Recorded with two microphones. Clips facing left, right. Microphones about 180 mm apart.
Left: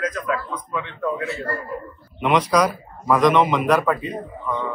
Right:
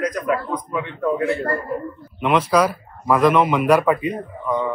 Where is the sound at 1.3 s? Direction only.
55° right (ahead or behind).